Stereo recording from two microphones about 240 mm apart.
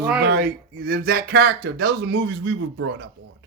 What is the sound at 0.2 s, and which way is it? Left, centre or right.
A man's voice, right.